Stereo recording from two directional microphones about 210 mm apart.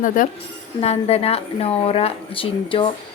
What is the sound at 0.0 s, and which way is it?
Speech, 40° left (ahead or behind).